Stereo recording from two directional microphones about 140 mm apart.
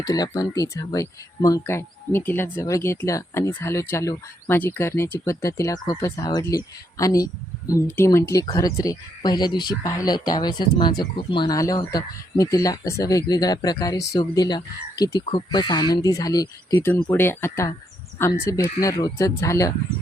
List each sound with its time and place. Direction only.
0.0 s speech: 25° left (ahead or behind)
16.9 s speech: 15° left (ahead or behind)